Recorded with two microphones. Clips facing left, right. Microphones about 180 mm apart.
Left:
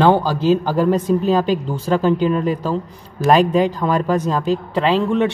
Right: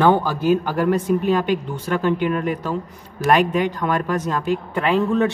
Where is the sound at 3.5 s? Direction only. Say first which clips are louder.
Left 4 dB; 35° left (ahead or behind).